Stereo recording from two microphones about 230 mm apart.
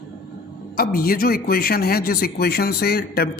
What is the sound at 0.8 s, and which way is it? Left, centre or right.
A man's voice, left.